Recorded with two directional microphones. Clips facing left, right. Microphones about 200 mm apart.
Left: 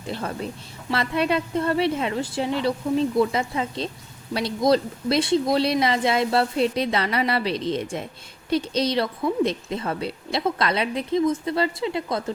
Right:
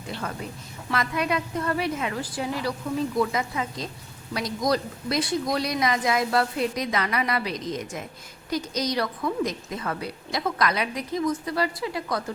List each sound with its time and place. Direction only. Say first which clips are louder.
0.9 s a woman's voice: left 3 dB; 30° left (ahead or behind)